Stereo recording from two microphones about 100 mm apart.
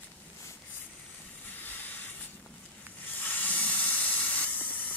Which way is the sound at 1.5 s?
20° left (ahead or behind).